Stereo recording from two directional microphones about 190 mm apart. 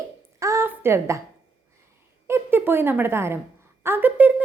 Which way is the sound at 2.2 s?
10° right (ahead or behind).